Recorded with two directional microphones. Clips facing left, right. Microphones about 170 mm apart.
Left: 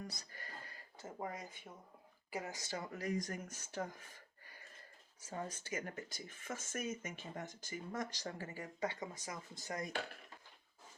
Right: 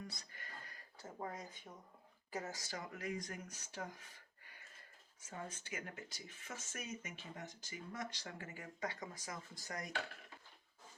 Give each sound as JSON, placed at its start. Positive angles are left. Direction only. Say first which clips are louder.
{"t": 0.1, "sound": "a sound", "louder": "left 3 dB", "side_deg": 40}
{"t": 1.2, "sound": "speech", "louder": "left 1 dB", "side_deg": 10}
{"t": 3.0, "sound": "speech", "louder": "left 5 dB", "side_deg": 40}
{"t": 5.2, "sound": "speech", "louder": "left 4 dB", "side_deg": 40}